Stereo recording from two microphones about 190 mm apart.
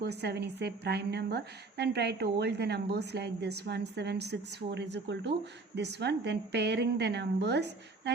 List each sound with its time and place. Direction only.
0.0 s a woman's voice: 60° right (ahead or behind)